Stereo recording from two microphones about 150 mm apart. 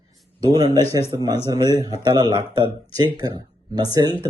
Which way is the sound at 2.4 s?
35° left (ahead or behind).